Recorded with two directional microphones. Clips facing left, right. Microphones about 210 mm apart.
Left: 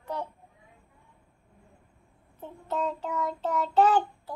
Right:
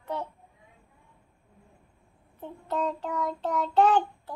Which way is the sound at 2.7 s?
5° left (ahead or behind).